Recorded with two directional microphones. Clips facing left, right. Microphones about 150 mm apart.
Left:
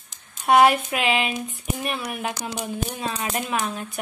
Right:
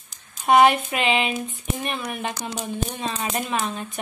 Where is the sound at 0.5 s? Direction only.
Centre (ahead or behind).